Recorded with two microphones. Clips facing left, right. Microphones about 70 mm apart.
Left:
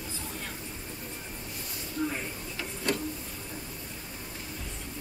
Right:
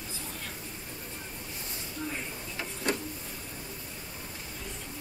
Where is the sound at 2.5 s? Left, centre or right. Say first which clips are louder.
Even; right.